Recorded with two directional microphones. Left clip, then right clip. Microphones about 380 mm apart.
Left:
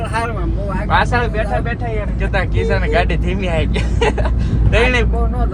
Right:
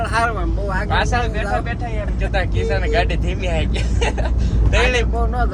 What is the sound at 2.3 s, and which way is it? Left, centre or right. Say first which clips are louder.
Speech: left 3 dB; centre.